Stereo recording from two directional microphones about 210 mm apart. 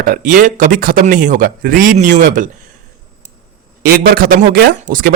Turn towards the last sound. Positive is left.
turn(degrees=-40)  # may be behind; listen again after turning